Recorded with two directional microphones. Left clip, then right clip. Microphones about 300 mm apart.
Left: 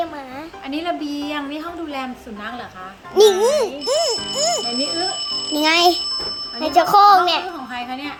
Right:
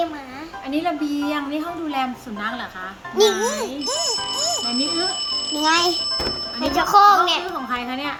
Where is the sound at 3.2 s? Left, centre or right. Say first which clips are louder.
Left 5 dB; left.